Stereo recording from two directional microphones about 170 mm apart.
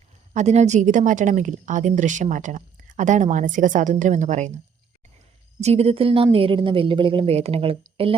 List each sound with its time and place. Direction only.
0.3 s a woman's voice: 40° right (ahead or behind)
5.5 s a woman's voice: 40° right (ahead or behind)